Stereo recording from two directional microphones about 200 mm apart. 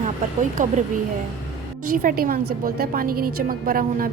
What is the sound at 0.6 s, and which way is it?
Speech, 40° right (ahead or behind).